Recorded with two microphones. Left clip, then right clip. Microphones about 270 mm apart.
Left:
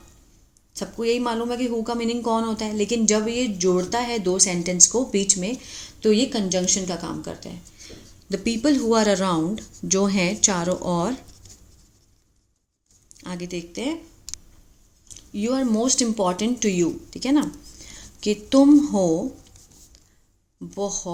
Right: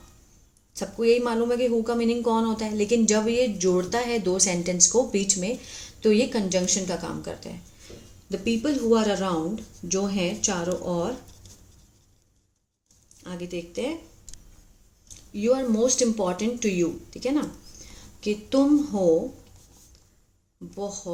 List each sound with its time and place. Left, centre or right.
0.7 s speech: centre
8.3 s speech: left
13.2 s speech: left
15.0 s speech: left
20.7 s speech: left